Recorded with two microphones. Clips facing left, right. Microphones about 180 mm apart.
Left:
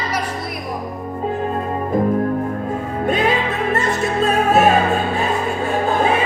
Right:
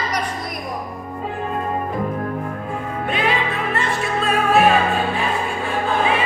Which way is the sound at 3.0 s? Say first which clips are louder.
Left 4 dB; 45° left (ahead or behind).